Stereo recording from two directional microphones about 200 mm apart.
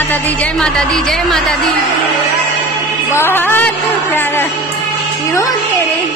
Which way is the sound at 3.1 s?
10° left (ahead or behind).